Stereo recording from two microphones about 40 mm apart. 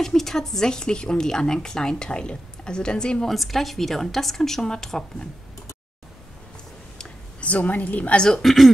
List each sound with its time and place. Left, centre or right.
0.0 s speech: centre
3.3 s speech: centre
7.3 s a woman's voice: left
8.4 s speech: centre